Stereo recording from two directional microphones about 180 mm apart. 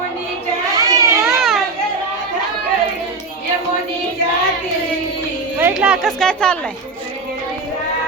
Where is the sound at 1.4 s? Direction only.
Centre (ahead or behind).